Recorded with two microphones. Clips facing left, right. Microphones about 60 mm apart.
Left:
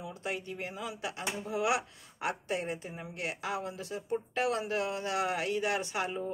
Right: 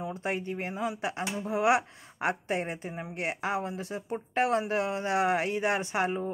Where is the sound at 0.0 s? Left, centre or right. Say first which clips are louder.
Right 5 dB; right.